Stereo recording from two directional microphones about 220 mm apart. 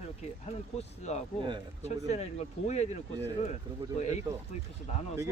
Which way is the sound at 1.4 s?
20° right (ahead or behind).